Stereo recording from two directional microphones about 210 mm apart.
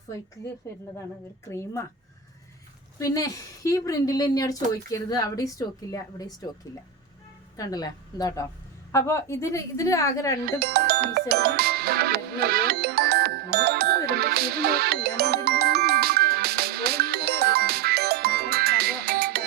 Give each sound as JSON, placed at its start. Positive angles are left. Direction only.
{"t": 1.5, "sound": "speech", "side_deg": 15}
{"t": 3.0, "sound": "speech", "side_deg": 15}
{"t": 7.5, "sound": "speech", "side_deg": 15}
{"t": 10.4, "sound": "music", "side_deg": -50}